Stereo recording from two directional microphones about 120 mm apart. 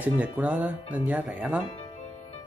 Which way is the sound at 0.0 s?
15° right (ahead or behind).